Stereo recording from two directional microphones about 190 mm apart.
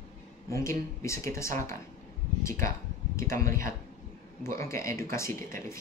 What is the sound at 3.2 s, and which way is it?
Speech, 15° left (ahead or behind).